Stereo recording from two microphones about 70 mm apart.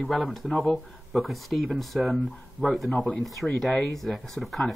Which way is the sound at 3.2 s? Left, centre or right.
Centre.